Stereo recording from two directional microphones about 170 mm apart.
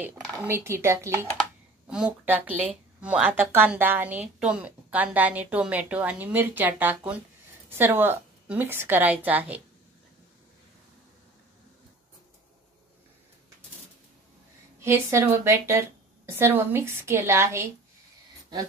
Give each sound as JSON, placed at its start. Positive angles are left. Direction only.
{"t": 0.0, "sound": "a woman's voice", "side_deg": -10}
{"t": 1.9, "sound": "a woman's voice", "side_deg": -5}
{"t": 14.8, "sound": "a woman's voice", "side_deg": -15}